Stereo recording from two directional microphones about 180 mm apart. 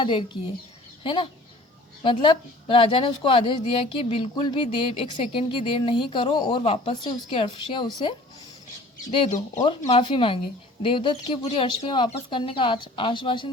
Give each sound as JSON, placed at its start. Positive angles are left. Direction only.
{"t": 0.0, "sound": "a woman's voice", "side_deg": 30}
{"t": 9.6, "sound": "a woman's voice", "side_deg": 30}